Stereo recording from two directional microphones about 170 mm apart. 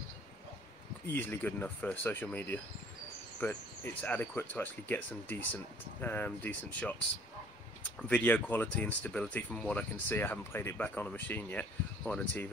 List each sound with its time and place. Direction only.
1.1 s speech: 10° left (ahead or behind)
8.1 s speech: 10° left (ahead or behind)